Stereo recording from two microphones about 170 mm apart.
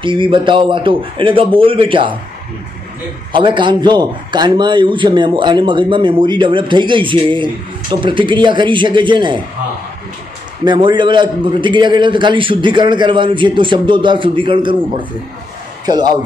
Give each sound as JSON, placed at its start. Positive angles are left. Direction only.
{"t": 0.0, "sound": "a man's voice", "side_deg": -30}
{"t": 3.3, "sound": "a man's voice", "side_deg": -30}
{"t": 10.6, "sound": "a man's voice", "side_deg": -25}